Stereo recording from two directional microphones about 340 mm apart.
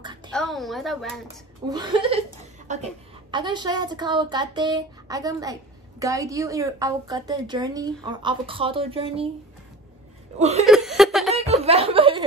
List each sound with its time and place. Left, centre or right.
0.0 s a sound: centre
0.3 s a woman's voice: centre
1.2 s a woman's voice: centre
10.7 s laughter: centre
11.3 s snicker: centre